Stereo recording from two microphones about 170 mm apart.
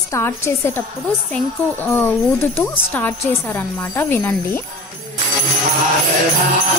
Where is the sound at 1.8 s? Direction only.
10° left (ahead or behind).